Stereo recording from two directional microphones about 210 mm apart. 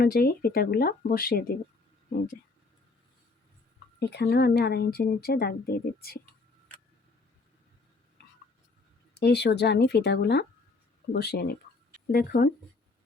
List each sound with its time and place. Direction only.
0.0 s speech: 45° left (ahead or behind)
4.0 s speech: 50° left (ahead or behind)
9.1 s speech: 50° left (ahead or behind)